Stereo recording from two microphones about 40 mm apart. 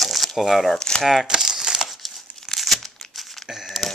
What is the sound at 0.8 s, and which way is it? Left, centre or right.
Speech, left.